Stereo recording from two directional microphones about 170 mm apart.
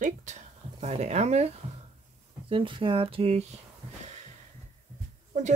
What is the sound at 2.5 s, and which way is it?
Speech, 30° right (ahead or behind).